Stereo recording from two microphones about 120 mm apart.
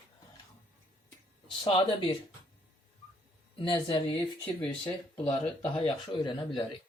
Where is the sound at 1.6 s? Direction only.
45° left (ahead or behind).